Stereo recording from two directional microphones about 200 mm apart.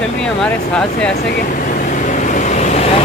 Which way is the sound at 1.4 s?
40° left (ahead or behind).